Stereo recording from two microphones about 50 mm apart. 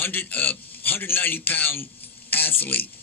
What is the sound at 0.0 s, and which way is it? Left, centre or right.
A man's voice, left.